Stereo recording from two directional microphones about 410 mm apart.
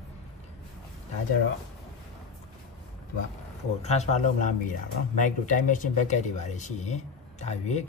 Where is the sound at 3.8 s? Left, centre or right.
Centre.